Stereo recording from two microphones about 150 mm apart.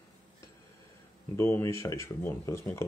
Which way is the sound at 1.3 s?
15° left (ahead or behind).